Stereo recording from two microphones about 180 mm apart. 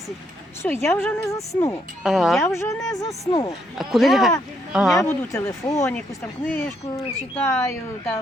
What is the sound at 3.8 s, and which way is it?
A man's voice, centre (ahead or behind).